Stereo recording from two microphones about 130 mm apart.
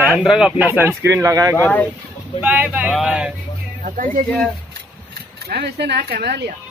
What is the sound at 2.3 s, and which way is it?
Speech, 10° right (ahead or behind).